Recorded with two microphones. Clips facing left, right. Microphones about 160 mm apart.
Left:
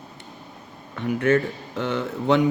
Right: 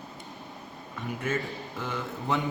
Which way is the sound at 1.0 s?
70° left (ahead or behind).